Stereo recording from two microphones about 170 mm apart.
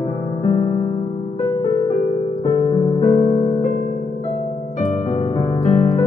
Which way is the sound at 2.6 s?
35° left (ahead or behind).